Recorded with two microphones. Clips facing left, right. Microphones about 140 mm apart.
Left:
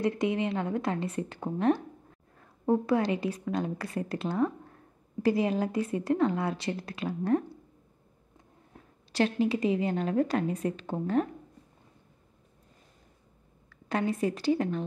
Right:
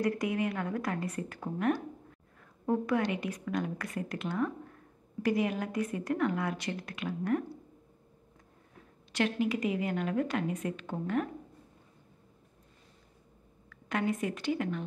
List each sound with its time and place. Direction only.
0.0 s a woman's voice: 25° left (ahead or behind)
9.1 s a woman's voice: 30° left (ahead or behind)
13.7 s a woman's voice: 35° left (ahead or behind)